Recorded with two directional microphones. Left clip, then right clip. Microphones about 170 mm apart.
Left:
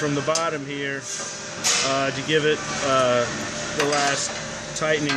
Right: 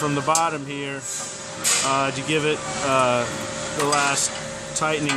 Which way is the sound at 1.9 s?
15° right (ahead or behind).